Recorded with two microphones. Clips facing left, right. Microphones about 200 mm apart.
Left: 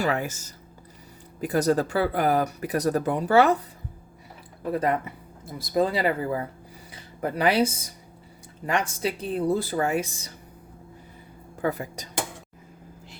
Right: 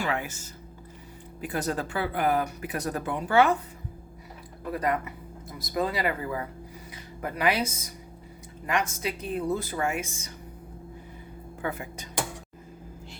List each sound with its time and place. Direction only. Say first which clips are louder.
0.0 s speech: left 4 dB; 40° left (ahead or behind)
4.7 s speech: left 3 dB; 30° left (ahead or behind)
11.6 s speech: left 6 dB; 40° left (ahead or behind)